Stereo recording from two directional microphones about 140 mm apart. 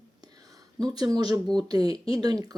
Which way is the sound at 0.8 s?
30° right (ahead or behind).